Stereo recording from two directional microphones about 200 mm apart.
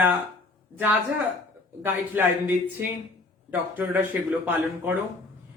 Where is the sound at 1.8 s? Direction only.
10° right (ahead or behind).